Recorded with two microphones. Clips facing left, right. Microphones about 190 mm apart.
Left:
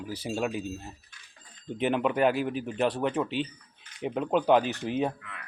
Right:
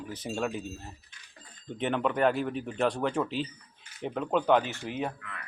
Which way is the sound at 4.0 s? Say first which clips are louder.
Left 2 dB; 15° left (ahead or behind).